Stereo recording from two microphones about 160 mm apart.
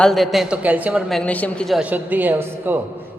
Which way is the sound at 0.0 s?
Centre (ahead or behind).